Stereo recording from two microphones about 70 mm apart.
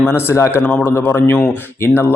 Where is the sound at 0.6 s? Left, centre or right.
Left.